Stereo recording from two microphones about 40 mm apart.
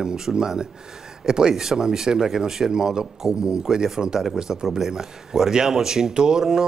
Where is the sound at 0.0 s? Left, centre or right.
Centre.